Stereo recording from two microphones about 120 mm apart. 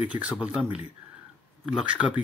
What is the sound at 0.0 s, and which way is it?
Speech, 10° right (ahead or behind).